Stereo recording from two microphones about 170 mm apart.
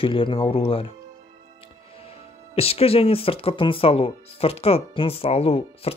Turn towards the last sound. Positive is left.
turn(degrees=35)  # may be behind; listen again after turning